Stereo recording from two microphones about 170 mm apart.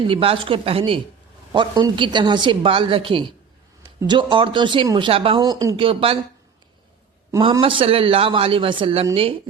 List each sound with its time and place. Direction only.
0.1 s speech: 30° right (ahead or behind)
7.6 s speech: 30° right (ahead or behind)